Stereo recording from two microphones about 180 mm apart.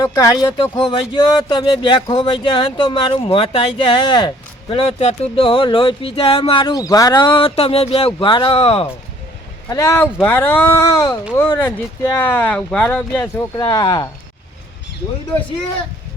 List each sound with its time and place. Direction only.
0.0 s speech: 20° left (ahead or behind)
0.8 s speech: 30° left (ahead or behind)
9.6 s speech: 15° left (ahead or behind)
13.6 s speech: 20° left (ahead or behind)